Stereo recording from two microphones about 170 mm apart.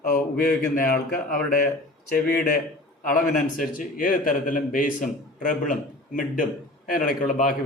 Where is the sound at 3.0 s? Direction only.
55° left (ahead or behind).